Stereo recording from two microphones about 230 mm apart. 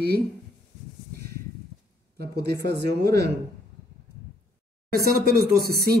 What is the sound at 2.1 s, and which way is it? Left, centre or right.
Speech, right.